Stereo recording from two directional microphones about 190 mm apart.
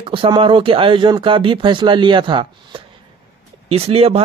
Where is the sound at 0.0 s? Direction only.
30° right (ahead or behind).